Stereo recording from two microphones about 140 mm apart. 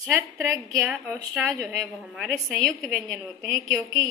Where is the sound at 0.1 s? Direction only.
15° right (ahead or behind).